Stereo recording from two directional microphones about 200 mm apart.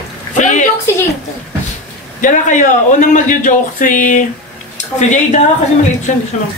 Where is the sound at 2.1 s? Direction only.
40° left (ahead or behind).